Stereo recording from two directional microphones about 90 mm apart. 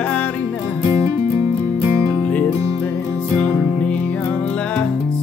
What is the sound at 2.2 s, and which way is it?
Music, 15° left (ahead or behind).